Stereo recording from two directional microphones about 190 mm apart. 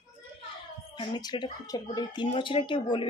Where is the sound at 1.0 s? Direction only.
25° left (ahead or behind).